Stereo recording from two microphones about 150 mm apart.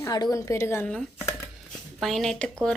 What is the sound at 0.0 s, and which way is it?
Speech, 25° left (ahead or behind).